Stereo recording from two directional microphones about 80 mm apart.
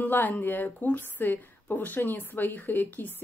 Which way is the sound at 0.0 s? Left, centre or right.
Left.